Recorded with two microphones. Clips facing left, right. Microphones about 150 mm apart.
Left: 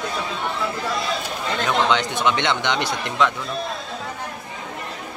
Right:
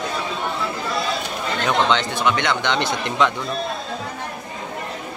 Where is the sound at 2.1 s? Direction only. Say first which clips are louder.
Even; 20° left (ahead or behind).